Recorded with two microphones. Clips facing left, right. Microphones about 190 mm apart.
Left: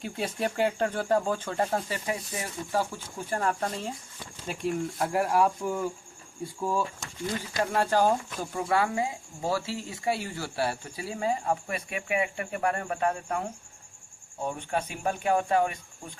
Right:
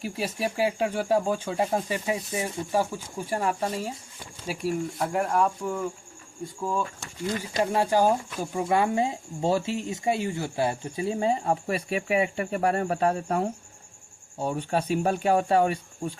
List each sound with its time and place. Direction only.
0.0 s speech: 5° right (ahead or behind)
7.3 s speech: 15° right (ahead or behind); by 16.1 s 30° right (ahead or behind)